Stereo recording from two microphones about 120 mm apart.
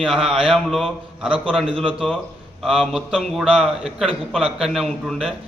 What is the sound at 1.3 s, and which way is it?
Speech, 50° right (ahead or behind).